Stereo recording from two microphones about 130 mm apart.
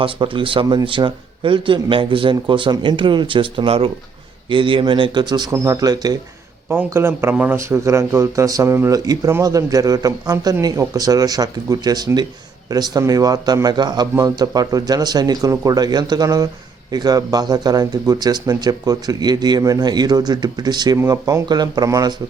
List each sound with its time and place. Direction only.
0.0 s speech: 40° right (ahead or behind)
6.7 s a man's voice: 20° right (ahead or behind)